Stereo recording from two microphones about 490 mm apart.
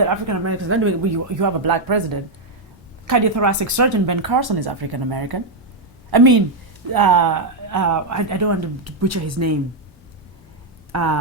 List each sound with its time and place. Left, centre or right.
0.0 s a woman's voice: right
10.9 s speech: right